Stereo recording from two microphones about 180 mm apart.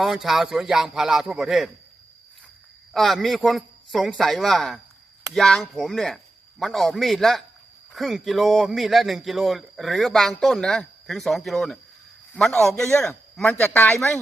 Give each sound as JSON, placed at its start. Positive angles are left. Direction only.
{"t": 0.0, "sound": "a man's voice", "side_deg": 0}
{"t": 2.9, "sound": "a man's voice", "side_deg": 0}